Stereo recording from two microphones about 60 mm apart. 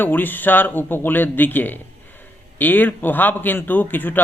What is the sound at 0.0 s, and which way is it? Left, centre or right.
Speech, left.